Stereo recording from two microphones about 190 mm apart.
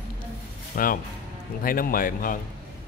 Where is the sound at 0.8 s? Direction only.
50° left (ahead or behind).